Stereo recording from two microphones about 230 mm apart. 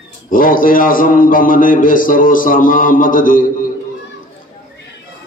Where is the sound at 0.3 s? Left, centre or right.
Left.